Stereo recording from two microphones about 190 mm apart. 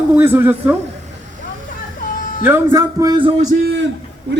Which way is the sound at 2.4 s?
15° right (ahead or behind).